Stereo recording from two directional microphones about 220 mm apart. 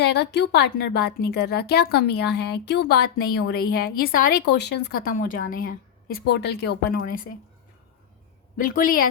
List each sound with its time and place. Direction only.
0.0 s speech: 50° left (ahead or behind)
8.5 s a woman's voice: 40° left (ahead or behind)